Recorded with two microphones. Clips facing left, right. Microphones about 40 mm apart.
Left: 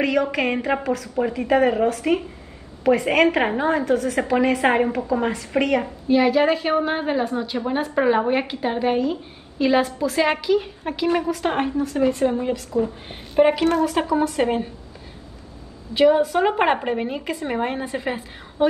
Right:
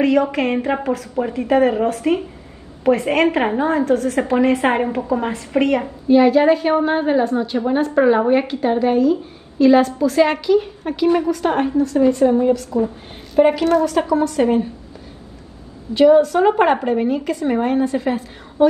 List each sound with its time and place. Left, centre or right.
0.0 s a woman's voice: centre
4.3 s a woman's voice: centre
11.5 s a woman's voice: left
13.4 s a woman's voice: centre
13.8 s a woman's voice: left
15.9 s a woman's voice: centre